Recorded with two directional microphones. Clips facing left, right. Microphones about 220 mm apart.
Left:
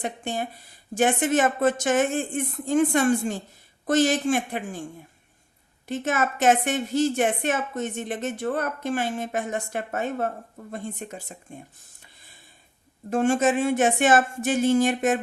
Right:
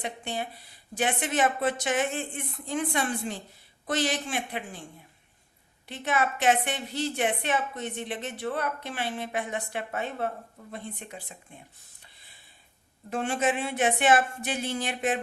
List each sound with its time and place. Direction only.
0.0 s a woman's voice: 45° left (ahead or behind)
5.9 s a woman's voice: 45° left (ahead or behind)
13.1 s a woman's voice: 45° left (ahead or behind)